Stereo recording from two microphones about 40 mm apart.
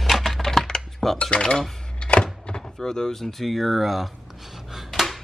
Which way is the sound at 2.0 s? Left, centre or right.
Left.